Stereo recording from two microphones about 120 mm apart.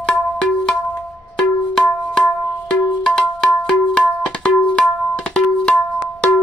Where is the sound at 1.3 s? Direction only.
5° left (ahead or behind).